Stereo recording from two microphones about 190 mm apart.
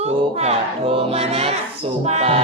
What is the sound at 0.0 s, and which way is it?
Speech, 35° right (ahead or behind).